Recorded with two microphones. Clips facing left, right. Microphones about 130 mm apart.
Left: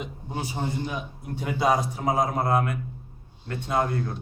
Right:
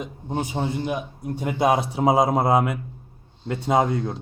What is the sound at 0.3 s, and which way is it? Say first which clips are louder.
A man's voice: right 4 dB; 50° right (ahead or behind).